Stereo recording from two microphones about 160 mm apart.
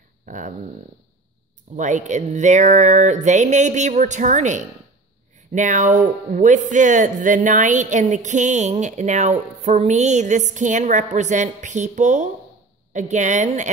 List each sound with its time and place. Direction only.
0.3 s speech: 50° right (ahead or behind)
1.8 s speech: 50° right (ahead or behind)